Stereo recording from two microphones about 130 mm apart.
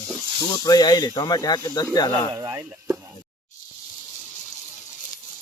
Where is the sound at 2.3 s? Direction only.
25° right (ahead or behind).